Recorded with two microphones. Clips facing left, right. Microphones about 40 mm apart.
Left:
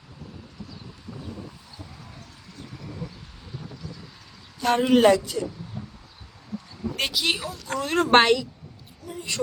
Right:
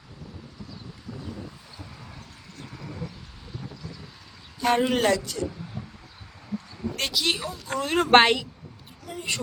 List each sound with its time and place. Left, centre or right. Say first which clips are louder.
3.2 s a sound: even; centre
4.6 s speech: left 4 dB; centre
6.9 s speech: left 1 dB; centre
8.1 s a woman's voice: even; right
9.0 s speech: right 2 dB; right